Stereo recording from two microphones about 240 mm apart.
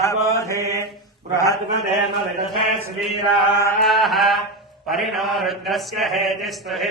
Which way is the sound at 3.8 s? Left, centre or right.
Centre.